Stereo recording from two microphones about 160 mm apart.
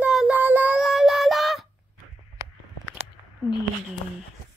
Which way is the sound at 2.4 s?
20° right (ahead or behind).